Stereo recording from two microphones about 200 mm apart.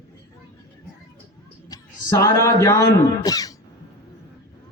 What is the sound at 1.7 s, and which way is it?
A man's voice, 15° left (ahead or behind).